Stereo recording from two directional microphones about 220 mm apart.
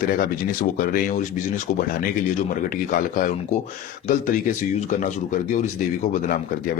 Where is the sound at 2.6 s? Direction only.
35° left (ahead or behind).